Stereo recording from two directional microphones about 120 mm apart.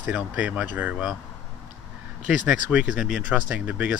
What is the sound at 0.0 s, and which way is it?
Speech, 10° right (ahead or behind).